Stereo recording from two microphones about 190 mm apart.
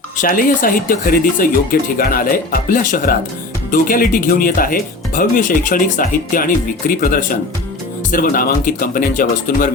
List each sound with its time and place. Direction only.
0.2 s speech: 45° left (ahead or behind)